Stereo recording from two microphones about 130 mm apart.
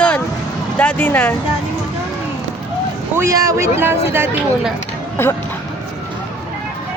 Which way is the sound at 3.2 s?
25° right (ahead or behind).